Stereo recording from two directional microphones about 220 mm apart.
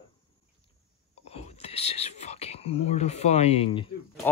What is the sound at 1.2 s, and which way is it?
Speech, 30° left (ahead or behind).